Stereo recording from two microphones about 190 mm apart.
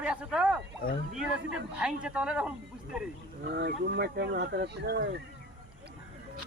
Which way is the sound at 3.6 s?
60° right (ahead or behind).